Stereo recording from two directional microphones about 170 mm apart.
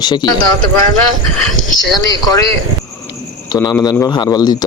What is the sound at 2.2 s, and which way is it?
A man's voice, 20° left (ahead or behind).